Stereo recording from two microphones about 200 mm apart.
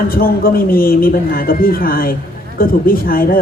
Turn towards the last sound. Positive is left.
turn(degrees=45)  # may be behind; listen again after turning